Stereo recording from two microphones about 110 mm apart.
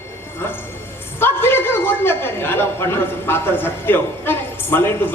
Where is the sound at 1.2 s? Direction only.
20° left (ahead or behind).